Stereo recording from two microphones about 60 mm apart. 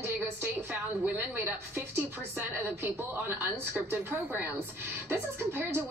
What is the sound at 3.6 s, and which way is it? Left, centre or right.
A woman's voice, right.